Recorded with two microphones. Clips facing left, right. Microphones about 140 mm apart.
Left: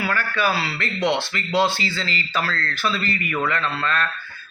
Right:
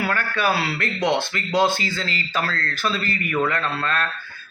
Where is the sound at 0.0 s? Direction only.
50° right (ahead or behind).